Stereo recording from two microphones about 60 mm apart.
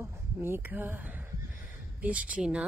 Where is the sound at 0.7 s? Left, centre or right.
Right.